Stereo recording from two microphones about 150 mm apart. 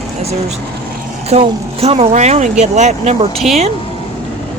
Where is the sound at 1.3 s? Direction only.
40° right (ahead or behind).